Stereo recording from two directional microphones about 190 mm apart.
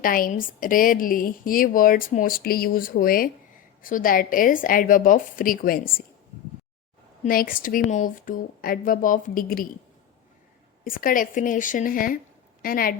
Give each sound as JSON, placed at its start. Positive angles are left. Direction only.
{"t": 0.0, "sound": "speech", "side_deg": 50}
{"t": 7.3, "sound": "speech", "side_deg": 50}
{"t": 10.8, "sound": "speech", "side_deg": 50}